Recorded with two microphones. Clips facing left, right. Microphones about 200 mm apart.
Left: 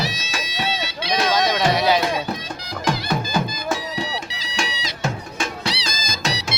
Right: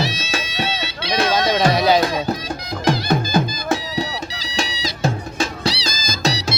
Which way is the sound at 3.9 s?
40° right (ahead or behind).